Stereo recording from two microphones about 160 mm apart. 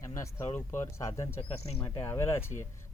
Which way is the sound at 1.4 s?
40° left (ahead or behind).